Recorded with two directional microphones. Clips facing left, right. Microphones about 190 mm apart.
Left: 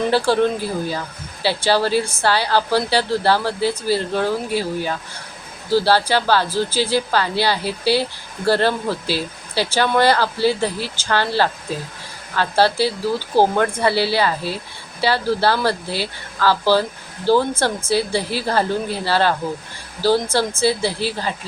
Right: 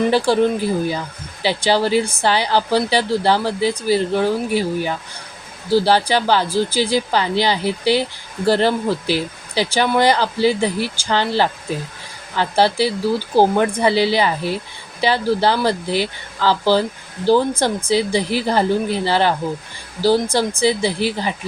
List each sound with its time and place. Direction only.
0.1 s speech: 15° right (ahead or behind)